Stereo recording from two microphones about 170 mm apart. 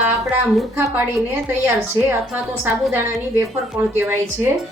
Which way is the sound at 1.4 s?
10° right (ahead or behind).